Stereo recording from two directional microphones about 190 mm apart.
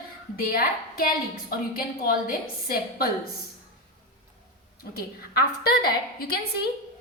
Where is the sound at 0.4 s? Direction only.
50° left (ahead or behind).